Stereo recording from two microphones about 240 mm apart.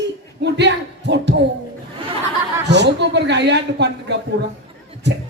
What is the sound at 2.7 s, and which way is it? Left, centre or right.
A man's voice, right.